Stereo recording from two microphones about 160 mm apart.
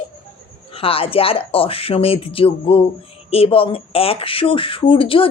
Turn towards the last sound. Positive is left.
turn(degrees=35)  # may be behind; listen again after turning